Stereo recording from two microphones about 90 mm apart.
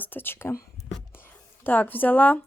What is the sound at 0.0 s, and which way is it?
Speech, 25° left (ahead or behind).